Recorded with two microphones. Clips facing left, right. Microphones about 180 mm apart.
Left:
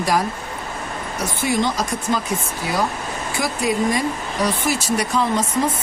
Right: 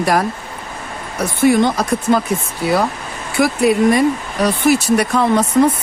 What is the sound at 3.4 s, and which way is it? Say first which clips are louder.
Speech: right 8 dB; 65° right (ahead or behind).